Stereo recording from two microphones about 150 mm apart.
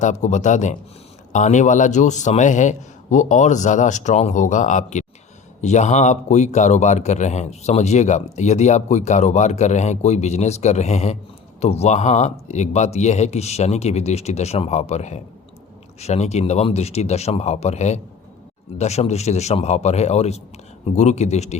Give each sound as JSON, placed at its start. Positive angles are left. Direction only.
{"t": 0.0, "sound": "speech", "side_deg": 50}